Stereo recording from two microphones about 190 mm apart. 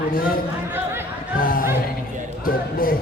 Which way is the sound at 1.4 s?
50° left (ahead or behind).